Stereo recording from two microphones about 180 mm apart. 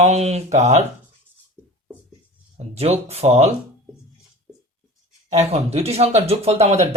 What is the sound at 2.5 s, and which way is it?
Speech, 35° right (ahead or behind).